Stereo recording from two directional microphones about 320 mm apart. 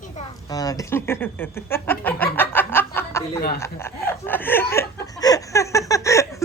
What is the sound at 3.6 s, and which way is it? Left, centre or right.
Speech, centre.